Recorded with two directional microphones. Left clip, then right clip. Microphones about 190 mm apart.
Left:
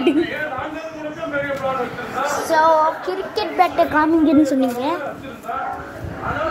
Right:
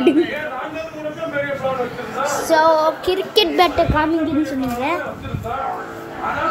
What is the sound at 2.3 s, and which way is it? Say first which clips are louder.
Female singing: right 1 dB; 35° right (ahead or behind).